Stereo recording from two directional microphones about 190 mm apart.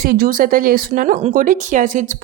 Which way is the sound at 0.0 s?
50° right (ahead or behind).